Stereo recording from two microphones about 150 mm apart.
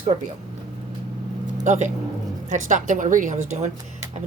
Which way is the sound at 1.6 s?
55° right (ahead or behind).